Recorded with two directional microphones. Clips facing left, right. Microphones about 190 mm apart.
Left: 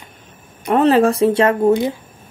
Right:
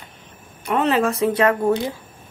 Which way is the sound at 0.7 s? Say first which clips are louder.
Left 6 dB; 35° left (ahead or behind).